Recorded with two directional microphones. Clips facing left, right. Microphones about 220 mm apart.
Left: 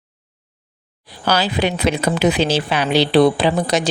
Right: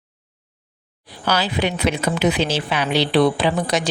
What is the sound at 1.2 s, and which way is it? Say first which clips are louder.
Speech: left 3 dB; 35° left (ahead or behind).